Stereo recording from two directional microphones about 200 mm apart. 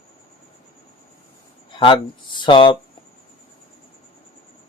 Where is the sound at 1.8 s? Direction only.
25° left (ahead or behind).